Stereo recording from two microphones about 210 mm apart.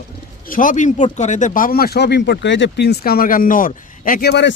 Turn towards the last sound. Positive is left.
turn(degrees=50)  # may be behind; listen again after turning